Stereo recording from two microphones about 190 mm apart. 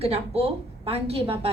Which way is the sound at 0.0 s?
30° right (ahead or behind).